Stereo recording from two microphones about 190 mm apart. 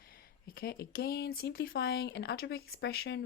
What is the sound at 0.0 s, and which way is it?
A woman's voice, 50° left (ahead or behind).